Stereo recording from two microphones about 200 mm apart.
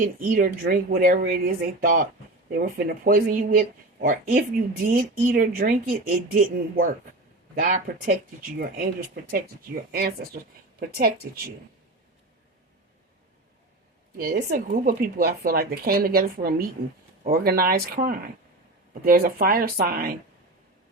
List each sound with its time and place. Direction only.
0.2 s speech: 45° right (ahead or behind)
14.2 s speech: 50° right (ahead or behind)